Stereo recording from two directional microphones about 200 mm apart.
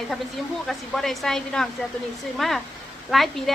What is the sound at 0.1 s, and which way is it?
A woman's voice, centre (ahead or behind).